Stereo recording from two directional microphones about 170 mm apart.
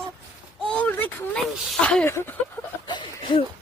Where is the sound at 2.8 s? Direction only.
25° left (ahead or behind).